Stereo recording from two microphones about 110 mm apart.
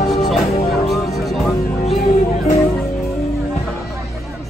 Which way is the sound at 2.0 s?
90° left.